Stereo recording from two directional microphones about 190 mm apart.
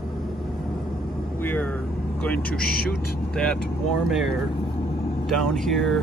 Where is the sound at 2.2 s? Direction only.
5° left (ahead or behind).